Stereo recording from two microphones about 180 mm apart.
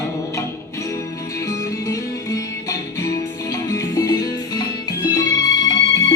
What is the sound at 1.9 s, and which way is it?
Music, 20° left (ahead or behind).